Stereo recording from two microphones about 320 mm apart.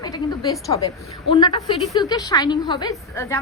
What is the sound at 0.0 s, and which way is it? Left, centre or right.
A woman's voice, centre.